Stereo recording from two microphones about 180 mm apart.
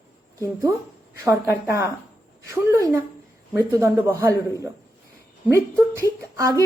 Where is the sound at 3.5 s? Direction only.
15° right (ahead or behind).